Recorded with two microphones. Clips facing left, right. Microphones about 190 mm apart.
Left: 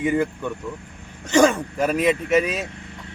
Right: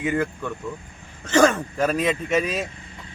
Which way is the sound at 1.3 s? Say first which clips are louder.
Left 1 dB; 10° left (ahead or behind).